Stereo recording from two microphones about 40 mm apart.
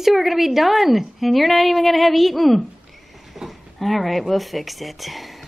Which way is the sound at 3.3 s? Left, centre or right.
Centre.